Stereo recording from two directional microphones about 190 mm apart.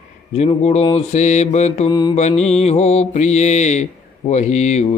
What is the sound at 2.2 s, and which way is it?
Speech, 35° left (ahead or behind).